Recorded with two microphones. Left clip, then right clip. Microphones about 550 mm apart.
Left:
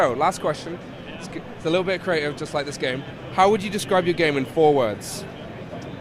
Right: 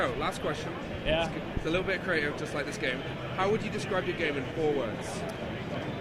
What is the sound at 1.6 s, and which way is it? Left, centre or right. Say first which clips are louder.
Speech: left 8 dB; left.